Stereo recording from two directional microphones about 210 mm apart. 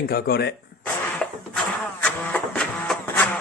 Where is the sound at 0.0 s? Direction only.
45° left (ahead or behind).